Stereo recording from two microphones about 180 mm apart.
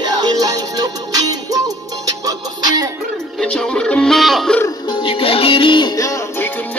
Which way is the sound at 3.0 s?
Centre (ahead or behind).